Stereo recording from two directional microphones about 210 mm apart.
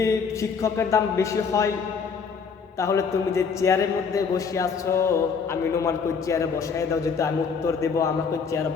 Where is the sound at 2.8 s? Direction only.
15° left (ahead or behind).